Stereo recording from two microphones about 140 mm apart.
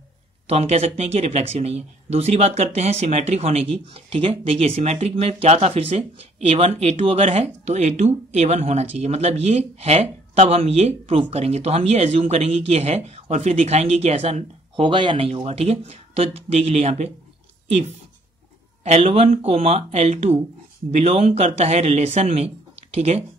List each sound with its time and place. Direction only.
0.5 s speech: 45° right (ahead or behind)
18.9 s speech: 50° right (ahead or behind)